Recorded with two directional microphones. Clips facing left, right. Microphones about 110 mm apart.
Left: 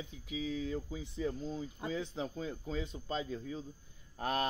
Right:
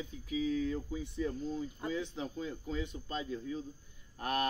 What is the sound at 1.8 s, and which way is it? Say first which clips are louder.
A man's voice: left 1 dB; 30° left (ahead or behind).